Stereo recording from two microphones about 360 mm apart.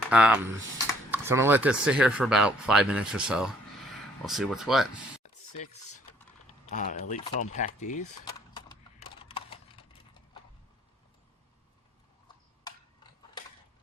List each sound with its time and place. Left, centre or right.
0.1 s speech: centre
6.7 s speech: left
8.5 s clip-clop: centre
12.6 s a sound: centre